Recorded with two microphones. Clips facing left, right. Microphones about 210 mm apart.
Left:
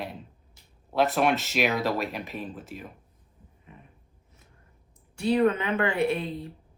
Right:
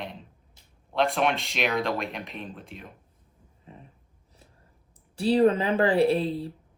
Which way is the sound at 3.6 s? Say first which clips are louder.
Right 4 dB; 30° right (ahead or behind).